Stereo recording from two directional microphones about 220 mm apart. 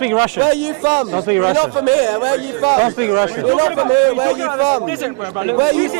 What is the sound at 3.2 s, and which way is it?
A man's voice, 25° right (ahead or behind).